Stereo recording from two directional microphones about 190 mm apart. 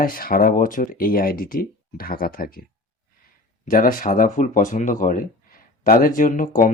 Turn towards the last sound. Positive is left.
turn(degrees=45)  # may be behind; listen again after turning